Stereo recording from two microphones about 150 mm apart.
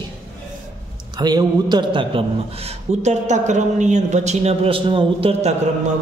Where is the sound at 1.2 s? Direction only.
30° right (ahead or behind).